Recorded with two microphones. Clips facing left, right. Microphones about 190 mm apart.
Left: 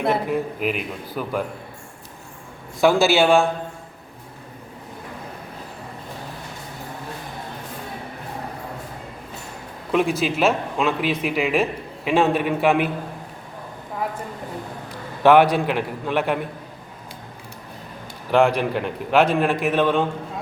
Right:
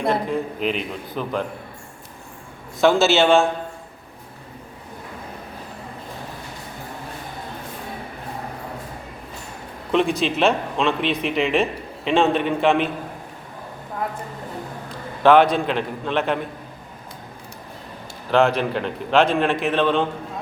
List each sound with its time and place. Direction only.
0.0 s a man's voice: 10° left (ahead or behind)
2.8 s a man's voice: 10° left (ahead or behind)
9.9 s speech: 5° left (ahead or behind)
15.2 s a man's voice: 15° left (ahead or behind)
18.3 s a man's voice: 15° left (ahead or behind)